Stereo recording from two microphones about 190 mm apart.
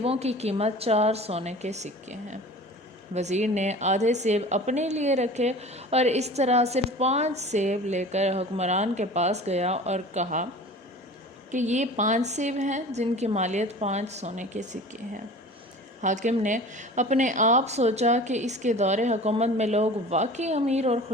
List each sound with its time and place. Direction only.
0.0 s a woman's voice: 30° right (ahead or behind)
11.5 s a woman's voice: 40° right (ahead or behind)